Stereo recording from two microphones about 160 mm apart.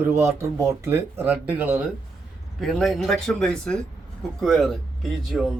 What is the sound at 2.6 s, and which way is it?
Speech, centre (ahead or behind).